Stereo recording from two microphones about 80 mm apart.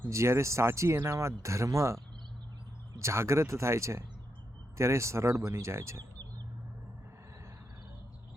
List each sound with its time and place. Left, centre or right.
0.1 s speech: right
3.0 s speech: right